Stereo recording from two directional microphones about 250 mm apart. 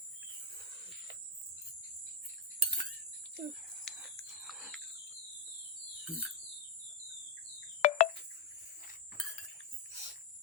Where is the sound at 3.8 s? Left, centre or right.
Centre.